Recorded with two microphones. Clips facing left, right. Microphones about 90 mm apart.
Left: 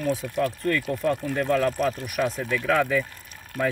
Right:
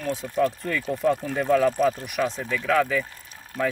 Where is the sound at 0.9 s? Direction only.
10° right (ahead or behind).